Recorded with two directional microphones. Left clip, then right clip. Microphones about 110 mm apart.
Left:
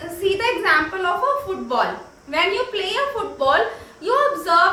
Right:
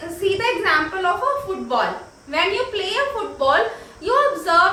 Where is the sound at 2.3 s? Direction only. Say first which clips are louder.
Even; 35° left (ahead or behind).